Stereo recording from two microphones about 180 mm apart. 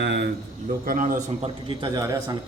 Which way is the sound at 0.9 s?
50° right (ahead or behind).